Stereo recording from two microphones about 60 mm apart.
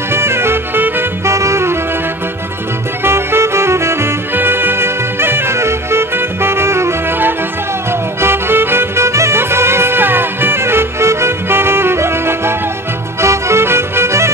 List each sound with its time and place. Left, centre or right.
0.1 s music: right
1.2 s music: right
3.0 s music: right
8.2 s music: right